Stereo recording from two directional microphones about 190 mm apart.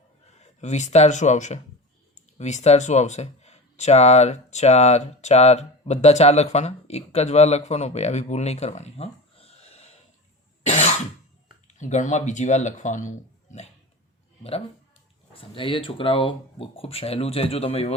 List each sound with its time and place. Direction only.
0.6 s speech: 35° left (ahead or behind)
10.7 s cough: 35° left (ahead or behind)
11.7 s speech: 40° left (ahead or behind)
15.3 s speech: 30° left (ahead or behind)